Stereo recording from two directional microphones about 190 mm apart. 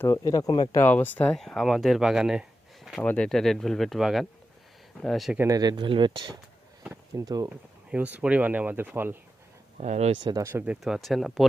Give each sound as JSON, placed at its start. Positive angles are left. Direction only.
{"t": 0.0, "sound": "speech", "side_deg": 20}
{"t": 5.4, "sound": "speech", "side_deg": -20}
{"t": 7.9, "sound": "speech", "side_deg": -10}
{"t": 9.7, "sound": "speech", "side_deg": -35}
{"t": 10.2, "sound": "speech", "side_deg": -15}